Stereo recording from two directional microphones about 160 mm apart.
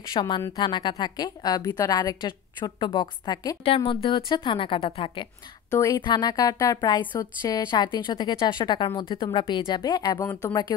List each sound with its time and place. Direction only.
0.1 s a woman's voice: 25° left (ahead or behind)